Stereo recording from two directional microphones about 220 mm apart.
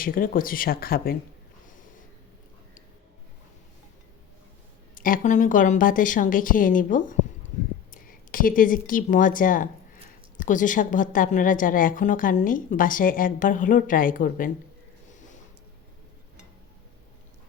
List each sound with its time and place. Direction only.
0.0 s a woman's voice: 40° left (ahead or behind)
4.9 s a woman's voice: 40° left (ahead or behind)